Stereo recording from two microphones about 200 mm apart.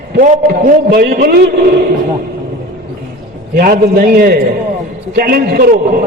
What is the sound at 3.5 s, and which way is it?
A man's voice, 45° right (ahead or behind).